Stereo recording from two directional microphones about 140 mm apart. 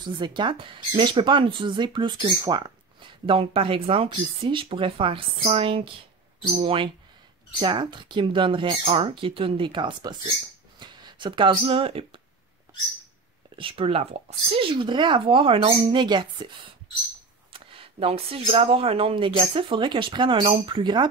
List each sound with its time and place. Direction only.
0.0 s speech: 35° right (ahead or behind)
13.6 s speech: 40° right (ahead or behind)
17.5 s a sound: 40° right (ahead or behind)
18.5 s speech: 45° right (ahead or behind)